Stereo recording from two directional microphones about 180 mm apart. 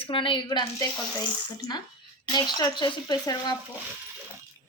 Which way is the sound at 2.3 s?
25° left (ahead or behind).